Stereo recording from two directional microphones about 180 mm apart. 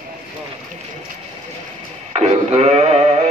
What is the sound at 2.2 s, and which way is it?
Sheep, 35° right (ahead or behind).